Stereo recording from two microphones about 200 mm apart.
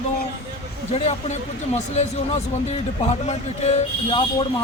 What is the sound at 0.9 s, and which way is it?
Speech, 35° left (ahead or behind).